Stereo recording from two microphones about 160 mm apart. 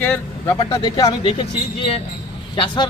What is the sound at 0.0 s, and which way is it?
Speech, 15° left (ahead or behind).